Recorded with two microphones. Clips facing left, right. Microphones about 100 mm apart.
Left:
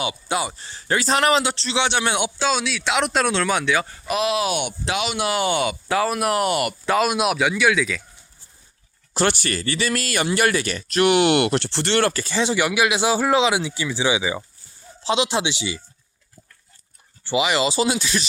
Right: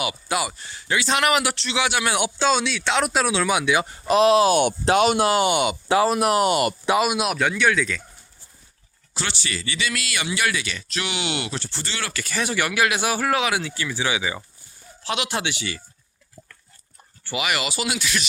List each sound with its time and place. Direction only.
0.0 s speech: 25° left (ahead or behind)
2.4 s speech: centre (ahead or behind); by 4.0 s 20° right (ahead or behind)
4.0 s speech: 35° right (ahead or behind)
6.9 s speech: 5° right (ahead or behind)
9.1 s speech: 50° left (ahead or behind)
12.1 s speech: 25° left (ahead or behind)
17.2 s speech: 25° left (ahead or behind)